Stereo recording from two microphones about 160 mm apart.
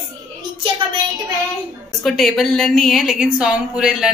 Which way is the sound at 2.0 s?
Centre (ahead or behind).